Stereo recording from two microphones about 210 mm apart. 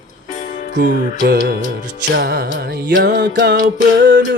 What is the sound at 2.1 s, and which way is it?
Music, 50° right (ahead or behind).